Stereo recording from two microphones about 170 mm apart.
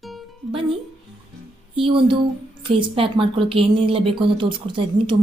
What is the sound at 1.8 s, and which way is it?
A woman's voice, 30° right (ahead or behind).